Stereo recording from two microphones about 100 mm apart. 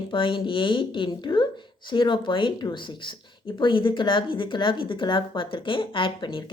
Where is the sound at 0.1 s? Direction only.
55° left (ahead or behind).